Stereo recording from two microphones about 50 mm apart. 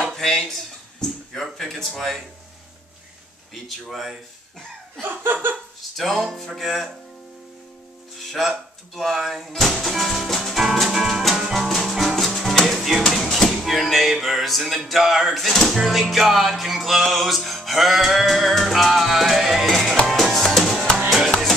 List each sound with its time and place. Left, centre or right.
0.1 s speech: centre
3.5 s speech: centre
5.0 s laughter: right
5.8 s speech: centre
8.2 s speech: centre
9.2 s music: centre
14.2 s speech: centre
20.1 s music: centre